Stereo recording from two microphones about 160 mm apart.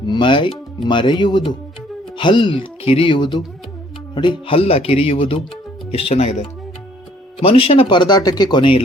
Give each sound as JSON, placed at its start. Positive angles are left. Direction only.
{"t": 0.0, "sound": "speech", "side_deg": 30}